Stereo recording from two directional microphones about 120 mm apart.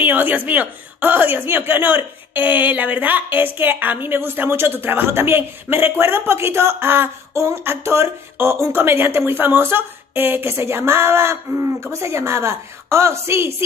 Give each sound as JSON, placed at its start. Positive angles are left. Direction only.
{"t": 0.0, "sound": "speech", "side_deg": -15}